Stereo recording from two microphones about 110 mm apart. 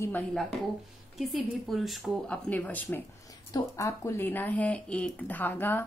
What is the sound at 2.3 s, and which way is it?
Speech, 15° left (ahead or behind).